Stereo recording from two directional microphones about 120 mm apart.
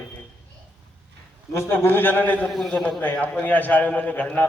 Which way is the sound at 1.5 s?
20° left (ahead or behind).